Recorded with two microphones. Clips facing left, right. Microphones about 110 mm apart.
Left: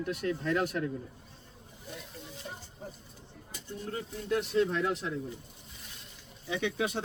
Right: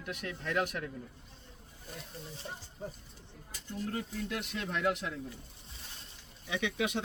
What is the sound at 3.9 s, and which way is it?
Speech, 30° left (ahead or behind).